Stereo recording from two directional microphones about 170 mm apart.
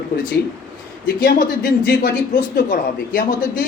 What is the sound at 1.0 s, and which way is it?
Speech, 60° left (ahead or behind).